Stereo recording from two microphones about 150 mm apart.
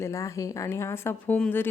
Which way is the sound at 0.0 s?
20° left (ahead or behind).